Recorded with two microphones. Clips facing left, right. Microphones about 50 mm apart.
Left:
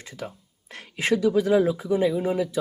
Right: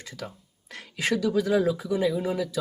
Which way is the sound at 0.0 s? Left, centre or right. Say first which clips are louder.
Left 2 dB; left.